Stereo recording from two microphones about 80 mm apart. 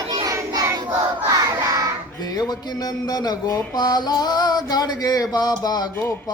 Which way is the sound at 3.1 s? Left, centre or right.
Left.